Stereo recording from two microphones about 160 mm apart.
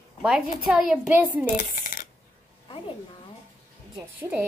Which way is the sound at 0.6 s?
5° right (ahead or behind).